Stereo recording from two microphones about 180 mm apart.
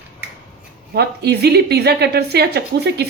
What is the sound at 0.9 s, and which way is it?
A woman's voice, 65° right (ahead or behind).